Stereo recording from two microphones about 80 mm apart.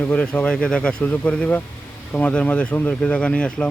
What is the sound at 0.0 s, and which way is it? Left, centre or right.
Speech, centre.